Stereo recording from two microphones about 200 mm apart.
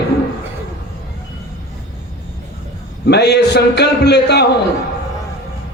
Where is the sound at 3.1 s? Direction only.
55° left (ahead or behind).